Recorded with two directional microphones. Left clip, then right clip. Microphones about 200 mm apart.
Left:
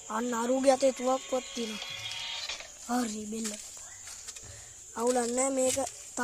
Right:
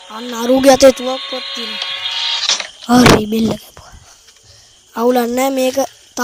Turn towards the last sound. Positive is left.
turn(degrees=-40)  # may be behind; listen again after turning